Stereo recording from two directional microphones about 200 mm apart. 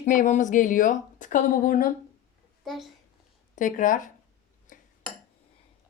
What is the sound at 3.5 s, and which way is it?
Speech, 40° left (ahead or behind).